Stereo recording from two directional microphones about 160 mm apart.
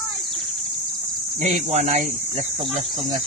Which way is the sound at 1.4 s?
45° right (ahead or behind).